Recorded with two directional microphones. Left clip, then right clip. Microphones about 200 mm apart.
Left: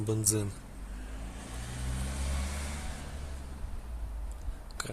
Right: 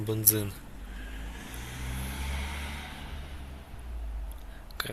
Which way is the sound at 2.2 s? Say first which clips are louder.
Right 3 dB; 55° left (ahead or behind).